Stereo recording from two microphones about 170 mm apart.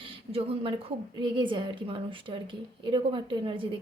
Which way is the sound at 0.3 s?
35° right (ahead or behind).